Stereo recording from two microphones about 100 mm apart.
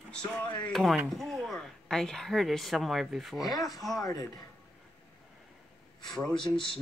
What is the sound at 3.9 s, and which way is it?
Speech, 35° left (ahead or behind).